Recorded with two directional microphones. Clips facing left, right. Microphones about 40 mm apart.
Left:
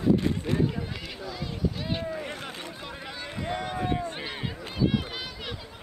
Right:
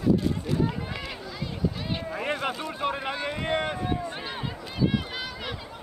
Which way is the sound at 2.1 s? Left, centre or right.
Right.